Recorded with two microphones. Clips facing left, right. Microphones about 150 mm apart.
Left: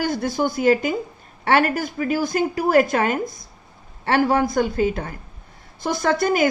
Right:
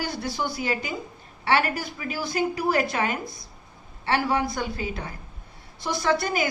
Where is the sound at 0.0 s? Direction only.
50° left (ahead or behind).